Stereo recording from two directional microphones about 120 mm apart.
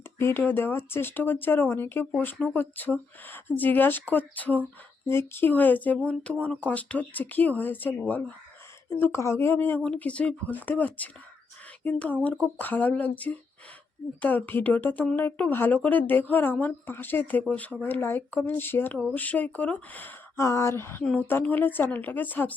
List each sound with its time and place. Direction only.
0.2 s speech: 20° left (ahead or behind)